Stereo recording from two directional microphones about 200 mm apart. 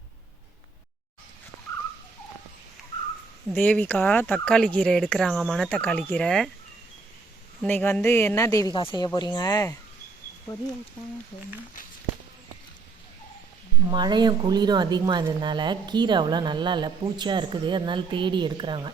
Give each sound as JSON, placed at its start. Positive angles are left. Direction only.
{"t": 3.5, "sound": "speech", "side_deg": 5}
{"t": 7.6, "sound": "speech", "side_deg": 10}
{"t": 13.9, "sound": "a woman's voice", "side_deg": -20}